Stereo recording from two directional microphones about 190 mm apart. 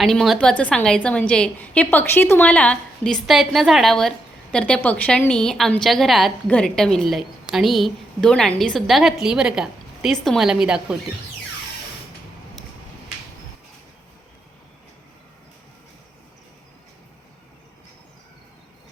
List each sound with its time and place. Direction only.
0.0 s a woman's voice: centre (ahead or behind)